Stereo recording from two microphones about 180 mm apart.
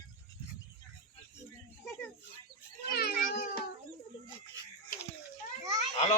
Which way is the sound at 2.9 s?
60° left (ahead or behind).